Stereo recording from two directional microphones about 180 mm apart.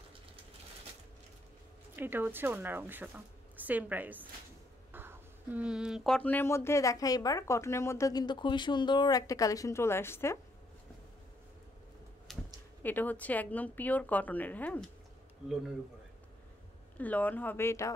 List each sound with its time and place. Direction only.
2.0 s a woman's voice: 10° right (ahead or behind); by 10.4 s 15° left (ahead or behind)
12.3 s a sound: centre (ahead or behind)
12.8 s speech: 10° left (ahead or behind)
17.0 s speech: 10° left (ahead or behind)